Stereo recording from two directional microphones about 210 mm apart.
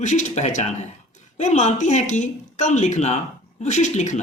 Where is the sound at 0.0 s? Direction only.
35° left (ahead or behind).